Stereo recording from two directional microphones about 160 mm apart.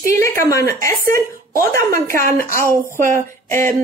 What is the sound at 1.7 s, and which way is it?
Speech, 15° left (ahead or behind).